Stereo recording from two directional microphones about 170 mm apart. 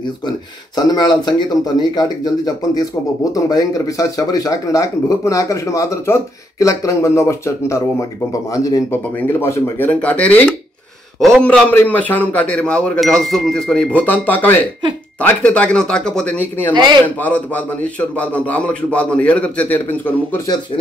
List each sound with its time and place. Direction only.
0.7 s speech: 25° left (ahead or behind)
16.7 s speech: 25° right (ahead or behind)
17.0 s speech: 10° left (ahead or behind)